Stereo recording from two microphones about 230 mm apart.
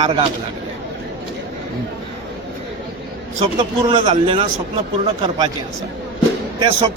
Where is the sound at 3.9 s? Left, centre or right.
Right.